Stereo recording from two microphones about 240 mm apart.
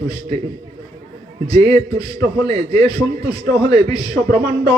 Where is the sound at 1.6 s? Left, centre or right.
Centre.